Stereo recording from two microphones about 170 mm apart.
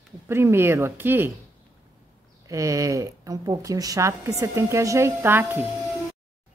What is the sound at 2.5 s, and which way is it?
Speech, 20° right (ahead or behind).